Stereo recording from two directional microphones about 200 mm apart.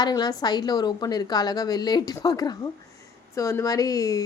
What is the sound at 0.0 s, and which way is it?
Speech, 20° left (ahead or behind).